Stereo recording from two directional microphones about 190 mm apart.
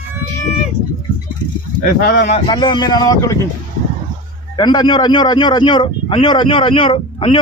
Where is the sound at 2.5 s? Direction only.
25° left (ahead or behind).